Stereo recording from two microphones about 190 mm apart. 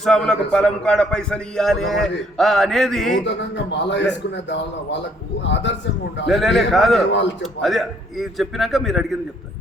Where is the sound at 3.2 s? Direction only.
65° left (ahead or behind).